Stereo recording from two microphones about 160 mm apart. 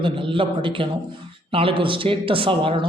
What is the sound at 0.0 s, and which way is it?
A man's voice, 30° right (ahead or behind).